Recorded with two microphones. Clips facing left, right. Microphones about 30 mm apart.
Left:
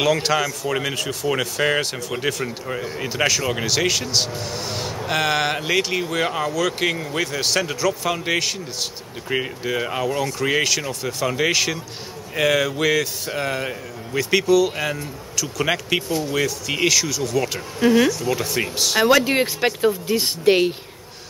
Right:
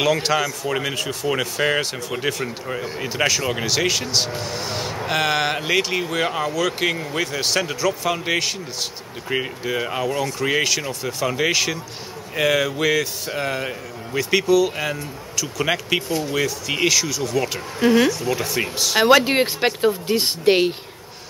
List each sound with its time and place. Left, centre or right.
0.0 s speech: centre
18.9 s speech: right